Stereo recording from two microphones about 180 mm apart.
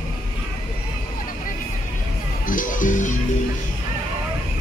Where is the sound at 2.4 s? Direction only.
50° left (ahead or behind).